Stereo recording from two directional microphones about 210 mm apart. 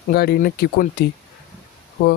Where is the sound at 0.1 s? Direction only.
45° left (ahead or behind).